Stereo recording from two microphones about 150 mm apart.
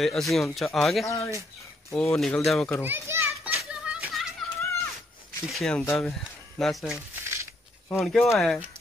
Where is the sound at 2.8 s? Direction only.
15° right (ahead or behind).